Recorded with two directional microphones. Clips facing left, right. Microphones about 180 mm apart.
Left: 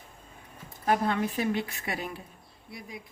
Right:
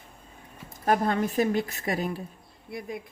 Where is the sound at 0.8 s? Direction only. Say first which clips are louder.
Right 2 dB; 45° right (ahead or behind).